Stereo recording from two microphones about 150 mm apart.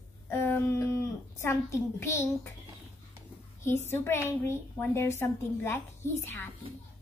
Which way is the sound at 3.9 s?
15° left (ahead or behind).